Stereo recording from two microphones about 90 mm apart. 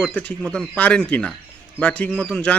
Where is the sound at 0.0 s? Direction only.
15° left (ahead or behind).